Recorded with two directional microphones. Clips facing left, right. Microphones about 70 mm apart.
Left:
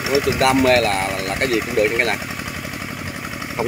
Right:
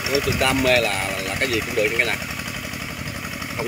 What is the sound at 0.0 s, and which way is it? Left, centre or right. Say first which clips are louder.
Speech: left 4 dB; left.